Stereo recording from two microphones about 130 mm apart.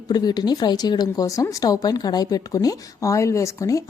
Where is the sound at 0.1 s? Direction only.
30° left (ahead or behind).